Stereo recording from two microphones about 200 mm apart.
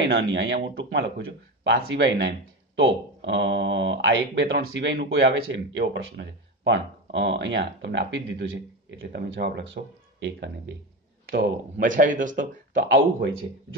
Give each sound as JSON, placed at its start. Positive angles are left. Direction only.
{"t": 0.0, "sound": "speech", "side_deg": -65}
{"t": 11.2, "sound": "speech", "side_deg": -60}
{"t": 11.8, "sound": "speech", "side_deg": -40}
{"t": 12.8, "sound": "speech", "side_deg": -65}